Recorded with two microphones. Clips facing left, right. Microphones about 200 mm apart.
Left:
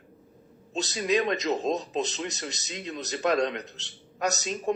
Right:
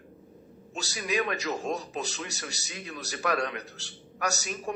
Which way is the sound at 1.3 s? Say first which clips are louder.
Left 4 dB; 20° left (ahead or behind).